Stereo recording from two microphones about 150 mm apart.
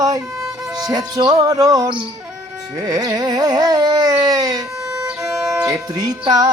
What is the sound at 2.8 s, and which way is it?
Carnatic music, 25° right (ahead or behind).